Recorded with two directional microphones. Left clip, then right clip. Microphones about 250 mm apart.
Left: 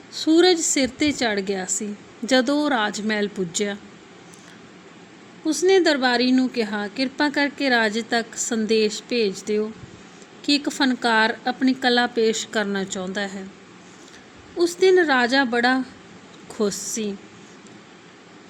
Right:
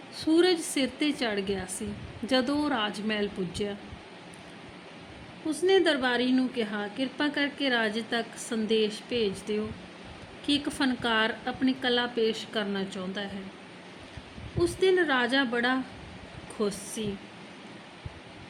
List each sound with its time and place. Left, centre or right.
0.1 s a woman's voice: centre
5.5 s a woman's voice: left
14.6 s a woman's voice: left